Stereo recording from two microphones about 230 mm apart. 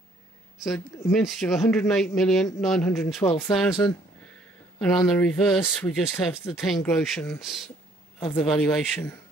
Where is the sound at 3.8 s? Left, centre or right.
Centre.